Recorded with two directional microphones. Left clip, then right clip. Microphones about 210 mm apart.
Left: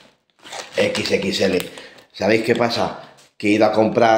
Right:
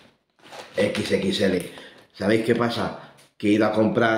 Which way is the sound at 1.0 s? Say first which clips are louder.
Left 4 dB; 10° right (ahead or behind).